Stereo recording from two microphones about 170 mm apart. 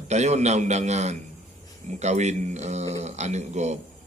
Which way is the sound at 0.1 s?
40° right (ahead or behind).